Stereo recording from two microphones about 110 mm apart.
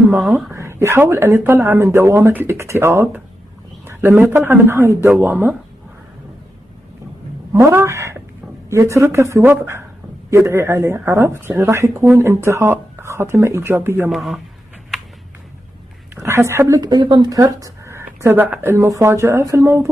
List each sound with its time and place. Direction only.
0.2 s speech: centre (ahead or behind)
0.5 s speech: 25° right (ahead or behind)
7.5 s speech: 25° right (ahead or behind)
14.1 s speech: centre (ahead or behind)
16.2 s speech: 25° right (ahead or behind)
16.8 s speech: 40° right (ahead or behind)
17.4 s speech: 30° right (ahead or behind)